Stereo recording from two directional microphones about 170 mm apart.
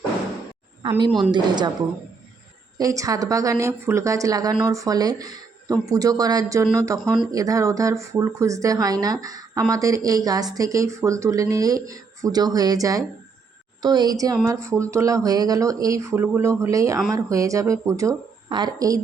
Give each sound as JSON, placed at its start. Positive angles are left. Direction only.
{"t": 0.8, "sound": "a woman's voice", "side_deg": -25}
{"t": 2.7, "sound": "speech", "side_deg": -20}
{"t": 7.0, "sound": "speech", "side_deg": 0}
{"t": 7.3, "sound": "speech", "side_deg": -20}